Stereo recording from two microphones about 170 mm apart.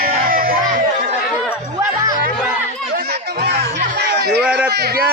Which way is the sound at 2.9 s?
70° right (ahead or behind).